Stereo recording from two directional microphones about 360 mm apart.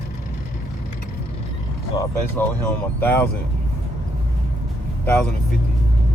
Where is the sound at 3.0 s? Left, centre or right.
Centre.